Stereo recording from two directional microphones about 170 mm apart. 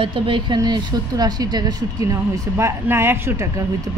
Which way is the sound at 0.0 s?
30° right (ahead or behind).